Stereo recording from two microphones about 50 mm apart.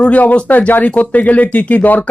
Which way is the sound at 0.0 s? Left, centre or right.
Left.